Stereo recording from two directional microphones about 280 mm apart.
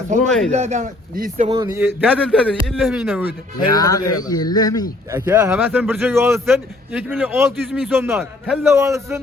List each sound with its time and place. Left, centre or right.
0.3 s a man's voice: centre
0.5 s speech: right
1.5 s a man's voice: centre
3.8 s speech: centre
5.1 s a man's voice: centre